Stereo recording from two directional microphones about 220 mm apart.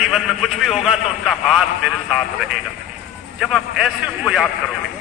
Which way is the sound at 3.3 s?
Centre (ahead or behind).